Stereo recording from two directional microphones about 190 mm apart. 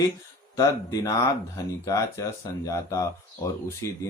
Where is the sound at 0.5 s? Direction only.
20° left (ahead or behind).